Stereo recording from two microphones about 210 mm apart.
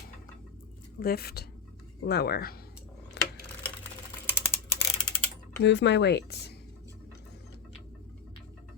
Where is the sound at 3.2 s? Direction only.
55° left (ahead or behind).